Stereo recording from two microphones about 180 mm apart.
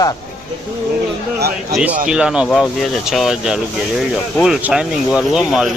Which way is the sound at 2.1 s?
5° right (ahead or behind).